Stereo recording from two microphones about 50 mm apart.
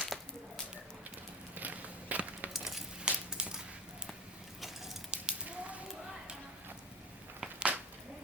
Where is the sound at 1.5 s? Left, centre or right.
Right.